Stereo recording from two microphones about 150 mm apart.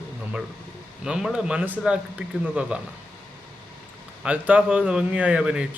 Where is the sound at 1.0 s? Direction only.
5° right (ahead or behind).